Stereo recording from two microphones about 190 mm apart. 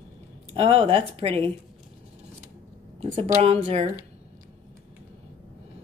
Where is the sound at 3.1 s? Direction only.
35° right (ahead or behind).